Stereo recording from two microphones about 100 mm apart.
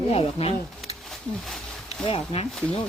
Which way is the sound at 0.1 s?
85° left.